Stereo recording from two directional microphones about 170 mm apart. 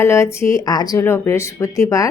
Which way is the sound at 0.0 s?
15° left (ahead or behind).